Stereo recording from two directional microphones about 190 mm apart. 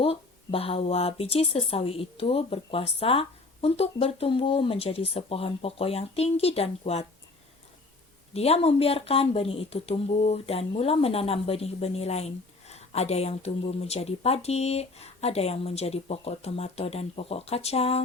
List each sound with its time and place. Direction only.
0.0 s speech: 30° left (ahead or behind)
8.3 s speech: 35° left (ahead or behind)